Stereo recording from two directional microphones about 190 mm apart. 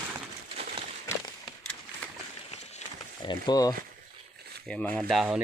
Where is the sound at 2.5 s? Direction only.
35° left (ahead or behind).